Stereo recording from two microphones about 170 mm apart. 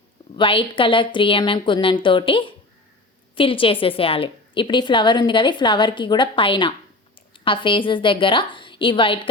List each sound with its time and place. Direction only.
0.3 s a woman's voice: 30° left (ahead or behind)